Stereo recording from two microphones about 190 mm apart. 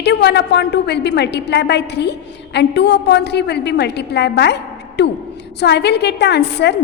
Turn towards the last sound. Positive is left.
turn(degrees=60)  # may be behind; listen again after turning